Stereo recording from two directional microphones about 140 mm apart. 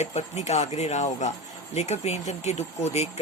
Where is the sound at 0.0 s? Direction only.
55° left (ahead or behind).